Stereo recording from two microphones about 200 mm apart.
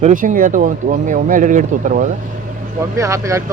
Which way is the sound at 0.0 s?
40° right (ahead or behind).